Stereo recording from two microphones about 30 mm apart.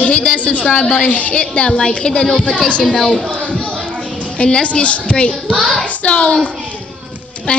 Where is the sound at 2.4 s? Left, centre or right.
Left.